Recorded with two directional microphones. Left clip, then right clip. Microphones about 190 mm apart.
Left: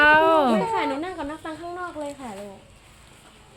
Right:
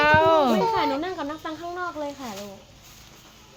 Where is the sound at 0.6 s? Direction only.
30° right (ahead or behind).